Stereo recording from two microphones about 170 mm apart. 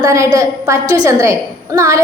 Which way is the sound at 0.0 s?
20° right (ahead or behind).